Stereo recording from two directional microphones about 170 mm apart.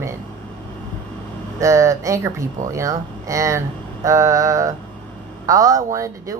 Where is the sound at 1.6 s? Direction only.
20° right (ahead or behind).